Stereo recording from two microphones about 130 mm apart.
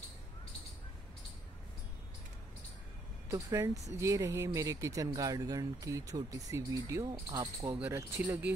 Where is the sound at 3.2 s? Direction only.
20° right (ahead or behind).